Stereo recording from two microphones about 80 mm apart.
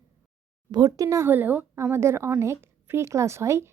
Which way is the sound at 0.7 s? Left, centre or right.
Right.